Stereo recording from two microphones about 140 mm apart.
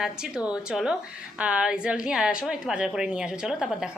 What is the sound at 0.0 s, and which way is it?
A woman's voice, 5° right (ahead or behind).